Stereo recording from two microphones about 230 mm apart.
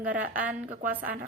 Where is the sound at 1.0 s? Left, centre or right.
Right.